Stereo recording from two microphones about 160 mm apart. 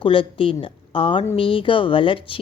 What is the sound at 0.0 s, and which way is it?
Speech, 35° left (ahead or behind).